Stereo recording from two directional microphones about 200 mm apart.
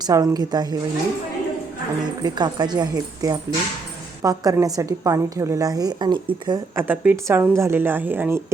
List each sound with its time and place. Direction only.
0.1 s speech: 20° right (ahead or behind)
2.2 s a woman's voice: 20° right (ahead or behind)
6.8 s a woman's voice: 10° right (ahead or behind)